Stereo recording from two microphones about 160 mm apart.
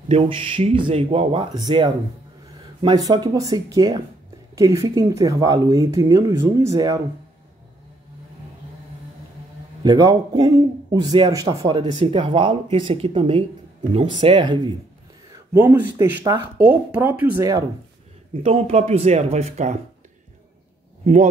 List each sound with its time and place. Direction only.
0.1 s speech: 35° right (ahead or behind)
3.1 s a man's voice: 25° right (ahead or behind)
9.8 s a man's voice: 25° right (ahead or behind)
15.5 s speech: 10° right (ahead or behind)
18.3 s speech: 40° right (ahead or behind)
21.0 s speech: 45° right (ahead or behind)